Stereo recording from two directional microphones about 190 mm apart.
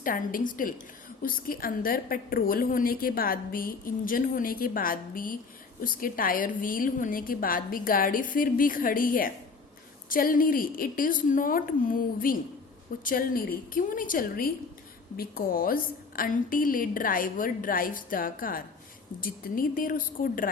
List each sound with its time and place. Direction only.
0.0 s a woman's voice: 45° left (ahead or behind)